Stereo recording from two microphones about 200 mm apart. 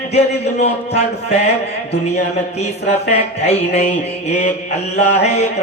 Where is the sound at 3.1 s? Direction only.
30° left (ahead or behind).